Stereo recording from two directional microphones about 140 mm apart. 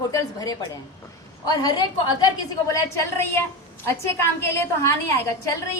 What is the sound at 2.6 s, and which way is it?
A woman's voice, 20° left (ahead or behind).